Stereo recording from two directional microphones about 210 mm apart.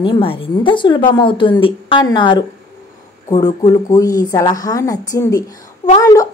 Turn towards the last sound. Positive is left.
turn(degrees=15)  # may be behind; listen again after turning